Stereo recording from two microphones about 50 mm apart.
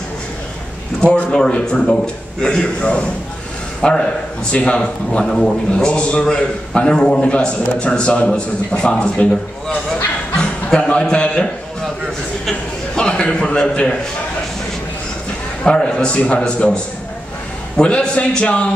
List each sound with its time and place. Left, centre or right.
1.3 s a man's voice: centre
10.3 s a man's voice: centre
12.9 s a sound: centre
15.6 s a man's voice: centre